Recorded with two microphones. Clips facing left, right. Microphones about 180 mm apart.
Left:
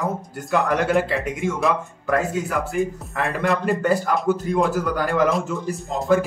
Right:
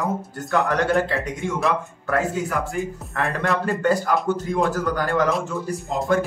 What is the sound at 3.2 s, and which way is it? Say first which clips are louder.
A man's voice: left 1 dB; centre (ahead or behind).